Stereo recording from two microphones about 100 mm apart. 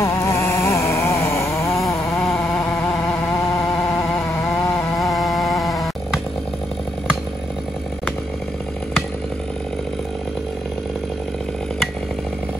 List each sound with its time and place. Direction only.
0.0 s vehicle: 30° left (ahead or behind)
2.2 s vehicle: 5° left (ahead or behind)
4.9 s a sound: centre (ahead or behind)